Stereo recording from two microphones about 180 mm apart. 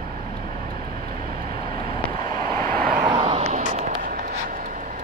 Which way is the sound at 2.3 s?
20° left (ahead or behind).